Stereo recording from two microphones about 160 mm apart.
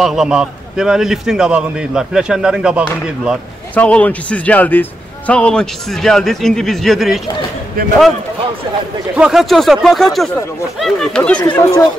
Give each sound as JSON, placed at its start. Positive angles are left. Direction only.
{"t": 0.0, "sound": "a man's voice", "side_deg": 0}
{"t": 3.7, "sound": "a man's voice", "side_deg": 10}
{"t": 9.1, "sound": "a man's voice", "side_deg": -5}
{"t": 11.5, "sound": "speech", "side_deg": 20}